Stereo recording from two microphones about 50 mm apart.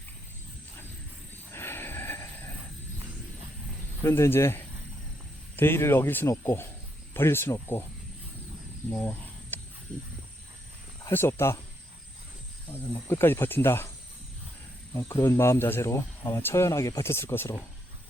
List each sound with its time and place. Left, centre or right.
1.5 s wild animals: left
4.0 s speech: left
6.2 s speech: left
9.1 s a sound: left
11.1 s speech: left
12.8 s speech: left
15.0 s speech: left
16.6 s speech: left